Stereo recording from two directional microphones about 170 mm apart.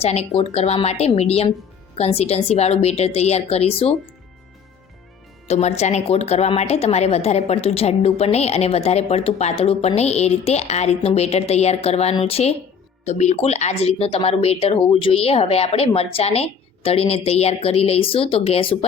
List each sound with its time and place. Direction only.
0.0 s speech: 35° left (ahead or behind)
5.5 s speech: 40° left (ahead or behind)